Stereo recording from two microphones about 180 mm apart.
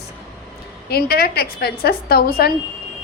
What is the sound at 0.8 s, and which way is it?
A woman's voice, 60° left (ahead or behind).